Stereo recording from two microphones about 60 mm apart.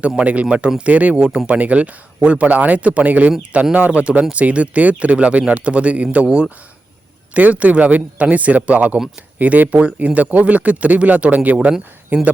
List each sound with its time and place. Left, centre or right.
0.2 s speech: right
7.3 s speech: right